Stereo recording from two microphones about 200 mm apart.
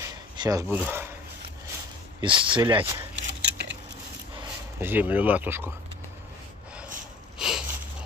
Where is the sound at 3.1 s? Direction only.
60° right (ahead or behind).